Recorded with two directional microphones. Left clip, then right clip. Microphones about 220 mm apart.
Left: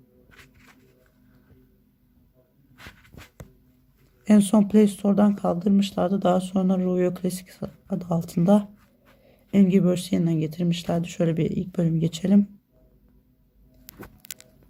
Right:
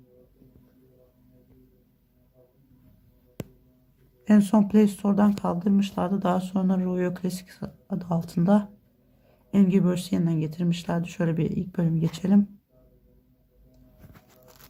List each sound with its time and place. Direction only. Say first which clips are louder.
4.3 s speech: left 2 dB; 5° left (ahead or behind)